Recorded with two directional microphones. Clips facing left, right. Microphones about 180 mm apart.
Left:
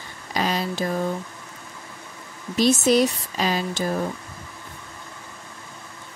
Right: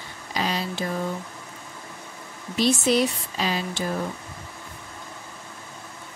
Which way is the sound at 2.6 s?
45° left (ahead or behind).